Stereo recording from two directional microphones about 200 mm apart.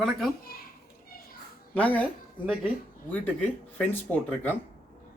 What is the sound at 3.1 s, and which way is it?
Speech, 10° left (ahead or behind).